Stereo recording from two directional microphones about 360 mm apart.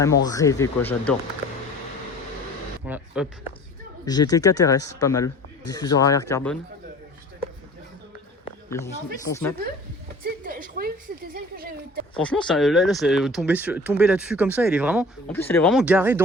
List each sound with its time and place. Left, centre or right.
0.3 s a man's voice: centre
2.8 s speech: centre
4.0 s a man's voice: centre
8.7 s a man's voice: centre
10.2 s a woman's voice: right
12.1 s speech: centre